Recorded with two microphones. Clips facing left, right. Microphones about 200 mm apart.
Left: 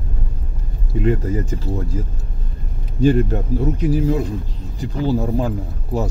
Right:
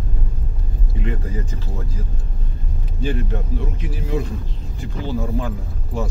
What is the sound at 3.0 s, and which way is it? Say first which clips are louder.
Speech: left 9 dB; 40° left (ahead or behind).